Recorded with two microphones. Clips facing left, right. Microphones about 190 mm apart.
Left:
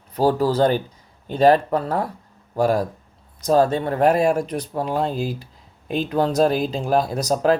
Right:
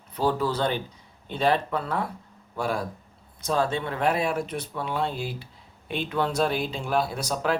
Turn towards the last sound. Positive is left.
turn(degrees=40)  # may be behind; listen again after turning